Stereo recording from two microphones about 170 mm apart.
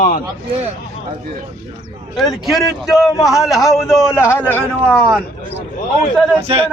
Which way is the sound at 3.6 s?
Centre (ahead or behind).